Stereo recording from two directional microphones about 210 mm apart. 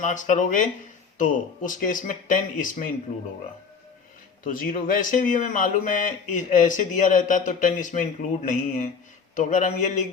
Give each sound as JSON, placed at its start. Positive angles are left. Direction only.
{"t": 0.0, "sound": "speech", "side_deg": 35}
{"t": 4.4, "sound": "speech", "side_deg": 40}